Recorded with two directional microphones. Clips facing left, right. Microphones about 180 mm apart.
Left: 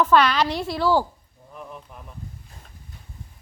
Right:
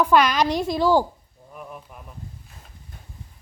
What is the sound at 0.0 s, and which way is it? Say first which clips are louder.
A woman's voice: even; 10° right (ahead or behind).